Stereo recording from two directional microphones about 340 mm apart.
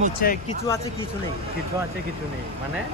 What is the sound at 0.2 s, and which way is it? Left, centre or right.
Speech, left.